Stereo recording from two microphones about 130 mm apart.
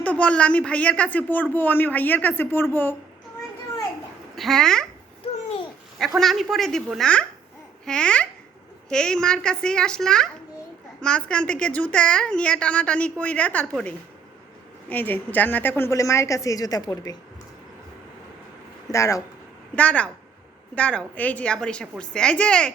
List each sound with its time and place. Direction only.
0.0 s speech: 10° left (ahead or behind)
4.4 s a child's voice: 5° left (ahead or behind)
6.1 s a child's voice: centre (ahead or behind)
14.8 s a woman's voice: 15° left (ahead or behind); by 17.2 s 30° left (ahead or behind)
18.9 s a woman's voice: 25° left (ahead or behind)
19.7 s speech: 10° left (ahead or behind)